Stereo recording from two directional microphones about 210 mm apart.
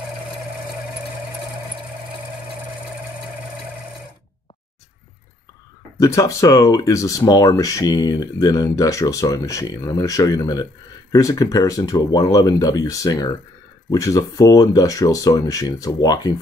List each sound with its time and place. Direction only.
5.9 s speech: 15° left (ahead or behind)